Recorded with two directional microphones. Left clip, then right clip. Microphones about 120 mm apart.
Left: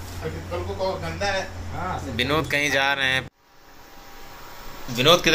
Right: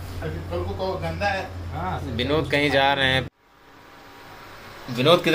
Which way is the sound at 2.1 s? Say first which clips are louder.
Even; centre (ahead or behind).